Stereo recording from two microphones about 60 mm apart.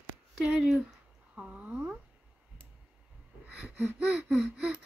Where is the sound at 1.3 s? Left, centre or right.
Centre.